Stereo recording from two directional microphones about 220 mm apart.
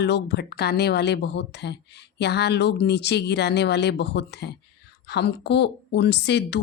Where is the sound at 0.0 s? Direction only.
50° left (ahead or behind).